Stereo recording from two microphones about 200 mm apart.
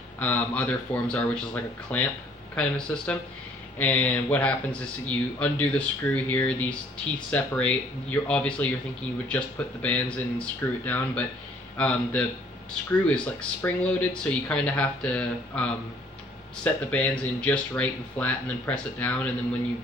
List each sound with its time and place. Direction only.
0.2 s speech: 10° left (ahead or behind)